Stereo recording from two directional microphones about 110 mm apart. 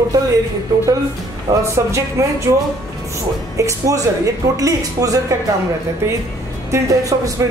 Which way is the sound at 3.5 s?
30° right (ahead or behind).